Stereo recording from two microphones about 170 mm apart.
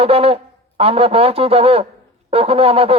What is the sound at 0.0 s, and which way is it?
Speech, 35° right (ahead or behind).